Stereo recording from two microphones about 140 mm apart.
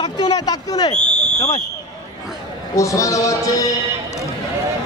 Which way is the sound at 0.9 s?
55° left (ahead or behind).